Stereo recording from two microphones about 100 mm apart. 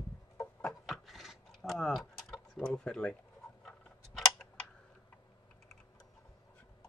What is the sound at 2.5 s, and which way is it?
Speech, 10° left (ahead or behind).